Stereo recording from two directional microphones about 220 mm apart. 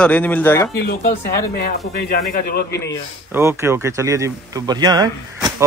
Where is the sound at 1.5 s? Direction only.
45° left (ahead or behind).